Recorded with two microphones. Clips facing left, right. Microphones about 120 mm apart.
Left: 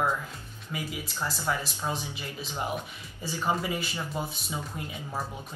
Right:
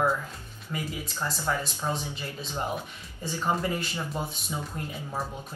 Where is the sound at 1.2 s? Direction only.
5° left (ahead or behind).